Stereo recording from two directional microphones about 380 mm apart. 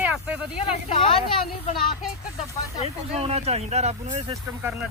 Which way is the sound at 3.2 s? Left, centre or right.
Centre.